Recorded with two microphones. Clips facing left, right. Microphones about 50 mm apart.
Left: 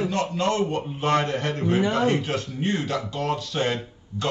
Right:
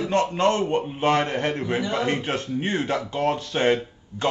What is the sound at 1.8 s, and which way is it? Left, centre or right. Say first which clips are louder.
Speech: left 3 dB; left.